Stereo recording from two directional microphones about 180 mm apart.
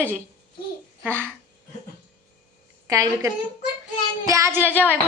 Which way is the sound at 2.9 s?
20° right (ahead or behind).